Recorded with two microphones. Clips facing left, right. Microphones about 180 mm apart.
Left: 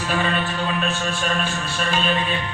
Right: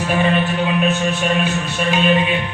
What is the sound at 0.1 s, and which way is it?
A man's voice, 20° right (ahead or behind).